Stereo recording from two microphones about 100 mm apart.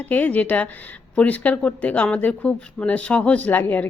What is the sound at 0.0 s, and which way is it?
A woman's voice, 15° left (ahead or behind).